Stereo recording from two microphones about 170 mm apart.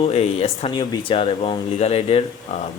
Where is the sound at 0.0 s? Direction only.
35° left (ahead or behind).